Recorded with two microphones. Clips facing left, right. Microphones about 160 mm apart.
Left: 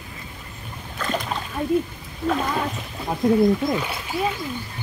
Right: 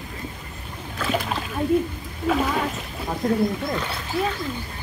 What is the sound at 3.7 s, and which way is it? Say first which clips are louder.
Speech: left 1 dB; 10° left (ahead or behind).